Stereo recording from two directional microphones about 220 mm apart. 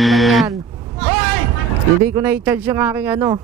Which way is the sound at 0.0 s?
Centre (ahead or behind).